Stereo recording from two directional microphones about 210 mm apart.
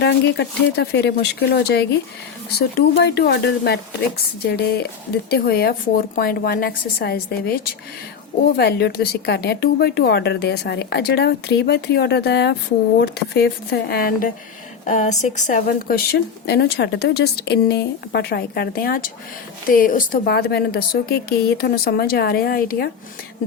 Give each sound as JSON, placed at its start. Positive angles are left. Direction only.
{"t": 0.0, "sound": "speech", "side_deg": 55}
{"t": 14.8, "sound": "speech", "side_deg": 35}